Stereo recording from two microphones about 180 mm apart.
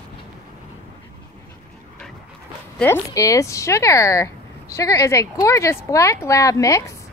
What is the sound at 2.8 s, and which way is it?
Speech, 15° left (ahead or behind).